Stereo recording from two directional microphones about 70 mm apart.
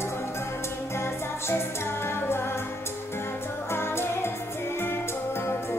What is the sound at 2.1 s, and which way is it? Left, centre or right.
Music, left.